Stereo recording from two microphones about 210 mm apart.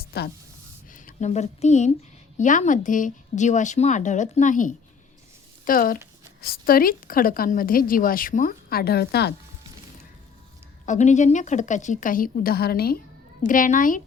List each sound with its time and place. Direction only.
0.0 s a sound: 50° left (ahead or behind)
0.9 s a woman's voice: 40° left (ahead or behind)
10.8 s speech: 35° left (ahead or behind)